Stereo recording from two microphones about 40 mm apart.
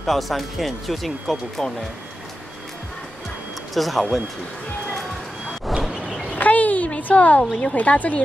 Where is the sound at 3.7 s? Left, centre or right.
Centre.